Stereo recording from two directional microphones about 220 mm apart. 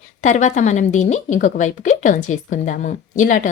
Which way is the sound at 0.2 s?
35° left (ahead or behind).